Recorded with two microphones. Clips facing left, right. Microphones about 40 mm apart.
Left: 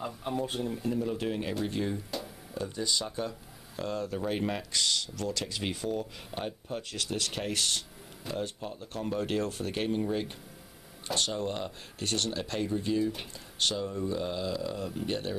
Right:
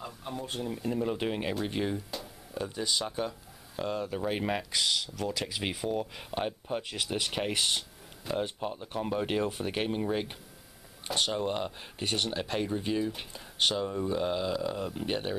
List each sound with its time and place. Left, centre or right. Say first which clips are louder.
0.0 s speech: left 5 dB; centre
0.9 s speech: right 4 dB; right